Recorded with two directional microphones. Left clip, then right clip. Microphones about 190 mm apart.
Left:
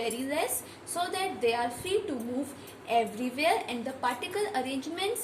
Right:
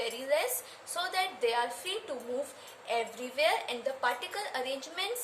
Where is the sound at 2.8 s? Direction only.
20° right (ahead or behind).